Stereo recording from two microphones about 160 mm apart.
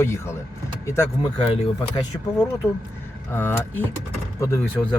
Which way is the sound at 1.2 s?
35° left (ahead or behind).